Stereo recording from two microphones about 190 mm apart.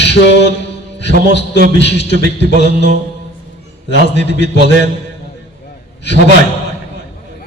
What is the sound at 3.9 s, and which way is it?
Speech, 65° left (ahead or behind).